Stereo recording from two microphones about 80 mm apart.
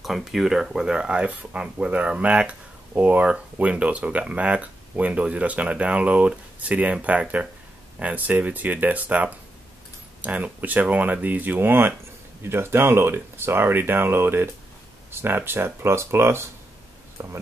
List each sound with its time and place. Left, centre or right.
0.0 s speech: centre; by 17.3 s right